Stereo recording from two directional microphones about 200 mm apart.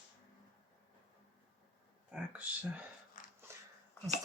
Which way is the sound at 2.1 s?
10° right (ahead or behind).